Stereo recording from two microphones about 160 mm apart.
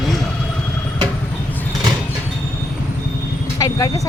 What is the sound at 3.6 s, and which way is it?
Vehicle, 20° left (ahead or behind).